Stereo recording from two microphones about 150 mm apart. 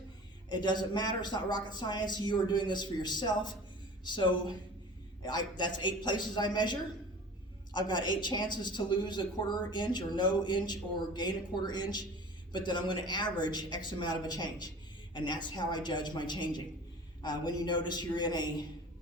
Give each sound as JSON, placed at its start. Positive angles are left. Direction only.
{"t": 0.5, "sound": "a woman's voice", "side_deg": 30}